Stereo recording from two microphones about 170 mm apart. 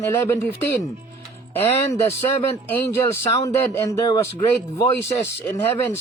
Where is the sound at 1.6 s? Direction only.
15° left (ahead or behind).